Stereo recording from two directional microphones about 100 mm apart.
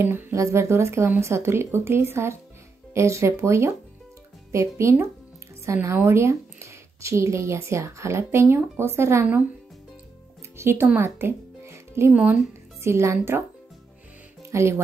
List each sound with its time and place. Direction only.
0.0 s speech: 20° right (ahead or behind)
4.7 s speech: 25° right (ahead or behind)
10.6 s speech: 25° right (ahead or behind)
11.0 s music: 25° right (ahead or behind)
12.1 s speech: 15° right (ahead or behind)
12.8 s speech: 30° right (ahead or behind)
14.5 s speech: 30° right (ahead or behind)